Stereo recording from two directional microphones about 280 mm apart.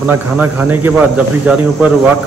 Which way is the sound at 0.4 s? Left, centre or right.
Centre.